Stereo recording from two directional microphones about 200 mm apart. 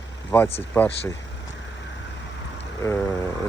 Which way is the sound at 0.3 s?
10° left (ahead or behind).